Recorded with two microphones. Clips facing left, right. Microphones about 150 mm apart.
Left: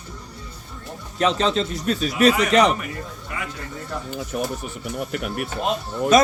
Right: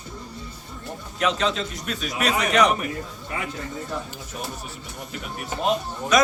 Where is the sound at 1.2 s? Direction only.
35° left (ahead or behind).